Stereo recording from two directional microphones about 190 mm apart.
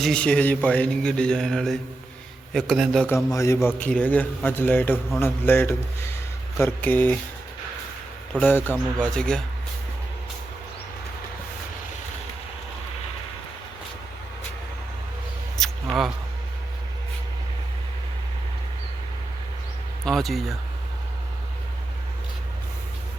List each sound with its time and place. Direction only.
0.0 s speech: 5° left (ahead or behind)
3.3 s a man's voice: 15° left (ahead or behind)
8.4 s a man's voice: 10° left (ahead or behind)
15.6 s a sound: centre (ahead or behind)
20.1 s speech: centre (ahead or behind)